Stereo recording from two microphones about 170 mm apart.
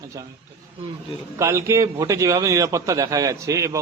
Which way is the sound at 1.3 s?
15° right (ahead or behind).